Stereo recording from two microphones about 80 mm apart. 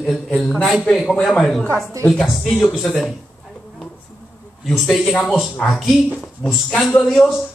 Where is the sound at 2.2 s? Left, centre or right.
Left.